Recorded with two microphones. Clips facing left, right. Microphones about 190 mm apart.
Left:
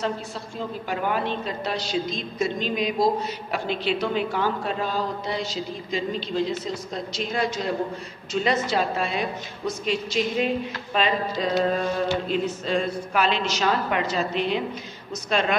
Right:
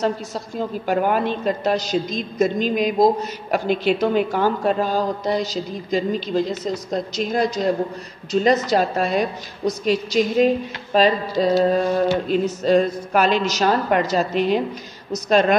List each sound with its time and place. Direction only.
0.6 s a woman's voice: 45° right (ahead or behind)